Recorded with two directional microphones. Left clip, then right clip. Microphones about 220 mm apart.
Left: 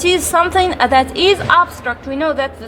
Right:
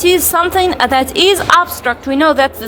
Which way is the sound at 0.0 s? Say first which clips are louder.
Right 2 dB; 5° right (ahead or behind).